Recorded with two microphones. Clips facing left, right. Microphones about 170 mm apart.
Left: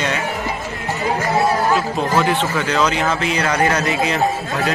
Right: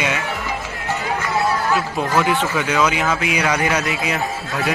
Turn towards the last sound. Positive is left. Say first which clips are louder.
# left 4 dB
turn(degrees=0)  # may be behind; listen again after turning